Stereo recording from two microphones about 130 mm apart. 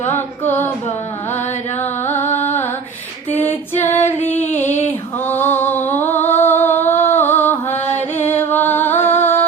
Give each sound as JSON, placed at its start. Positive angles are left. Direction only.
{"t": 0.1, "sound": "female singing", "side_deg": 15}
{"t": 1.8, "sound": "music", "side_deg": 15}
{"t": 2.2, "sound": "music", "side_deg": 60}
{"t": 3.3, "sound": "female singing", "side_deg": 15}
{"t": 5.2, "sound": "a sound", "side_deg": 15}
{"t": 7.7, "sound": "music", "side_deg": 60}
{"t": 8.2, "sound": "music", "side_deg": 15}